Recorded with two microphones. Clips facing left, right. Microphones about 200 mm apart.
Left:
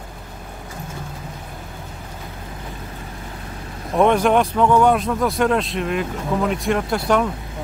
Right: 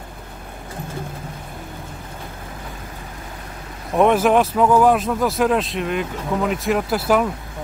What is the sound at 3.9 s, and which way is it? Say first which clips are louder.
Speech: right 1 dB; 5° right (ahead or behind).